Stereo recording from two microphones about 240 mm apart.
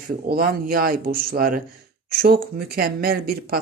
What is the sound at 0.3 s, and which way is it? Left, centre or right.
Speech, right.